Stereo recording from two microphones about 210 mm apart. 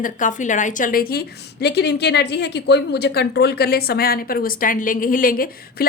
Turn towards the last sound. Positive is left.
turn(degrees=45)  # may be behind; listen again after turning